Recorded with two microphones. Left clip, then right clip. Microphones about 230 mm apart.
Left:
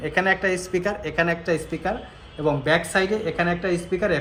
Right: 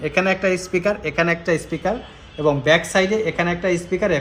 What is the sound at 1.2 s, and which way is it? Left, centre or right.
Speech, right.